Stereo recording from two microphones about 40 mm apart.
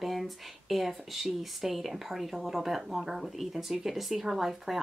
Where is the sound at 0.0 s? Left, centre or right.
Centre.